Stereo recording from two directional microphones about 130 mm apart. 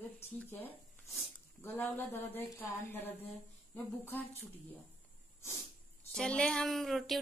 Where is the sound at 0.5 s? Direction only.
15° left (ahead or behind).